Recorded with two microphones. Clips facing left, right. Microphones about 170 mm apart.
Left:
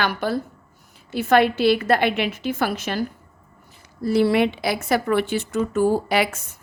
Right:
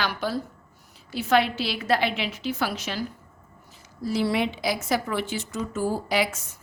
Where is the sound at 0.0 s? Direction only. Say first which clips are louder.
Left 4 dB; 55° left (ahead or behind).